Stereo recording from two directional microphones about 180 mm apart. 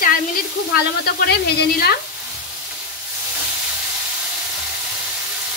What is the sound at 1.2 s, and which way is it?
Speech, 65° left (ahead or behind).